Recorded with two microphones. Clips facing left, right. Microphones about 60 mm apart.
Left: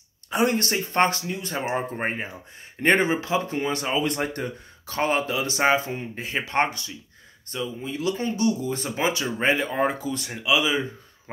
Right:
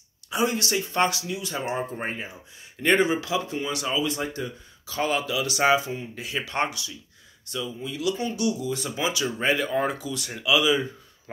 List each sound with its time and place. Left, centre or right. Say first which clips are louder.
0.3 s speech: left 2 dB; left
10.3 s speech: right 1 dB; left